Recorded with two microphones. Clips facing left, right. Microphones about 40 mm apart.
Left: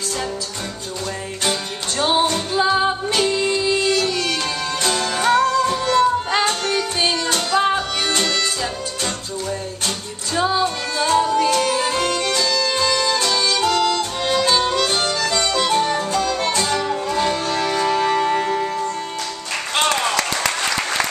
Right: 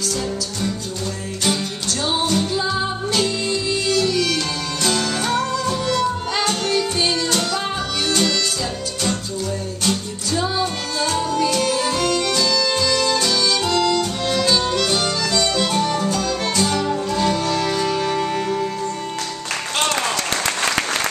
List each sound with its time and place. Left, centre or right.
2.0 s music: left
2.2 s music: centre
2.6 s music: left
4.8 s music: centre
7.5 s music: left
11.0 s music: centre